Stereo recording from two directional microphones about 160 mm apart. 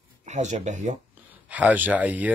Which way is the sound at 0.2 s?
45° right (ahead or behind).